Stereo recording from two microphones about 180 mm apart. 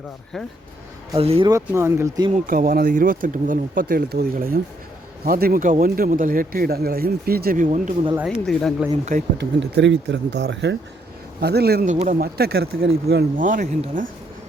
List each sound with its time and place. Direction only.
1.1 s speech: 30° right (ahead or behind)
1.5 s speech: 15° right (ahead or behind)
2.5 s a man's voice: 50° right (ahead or behind)
8.1 s speech: 5° right (ahead or behind)
9.4 s speech: 75° right (ahead or behind)
11.3 s a man's voice: 65° right (ahead or behind)
11.9 s a man's voice: 45° right (ahead or behind)
12.4 s a man's voice: 60° right (ahead or behind); by 14.1 s 45° right (ahead or behind)